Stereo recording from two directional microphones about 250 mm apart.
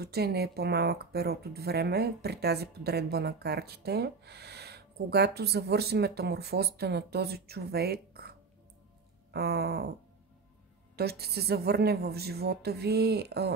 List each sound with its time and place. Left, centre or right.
0.0 s speech: right
11.0 s speech: right